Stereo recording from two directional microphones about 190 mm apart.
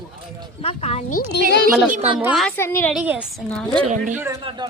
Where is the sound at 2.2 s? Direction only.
5° right (ahead or behind).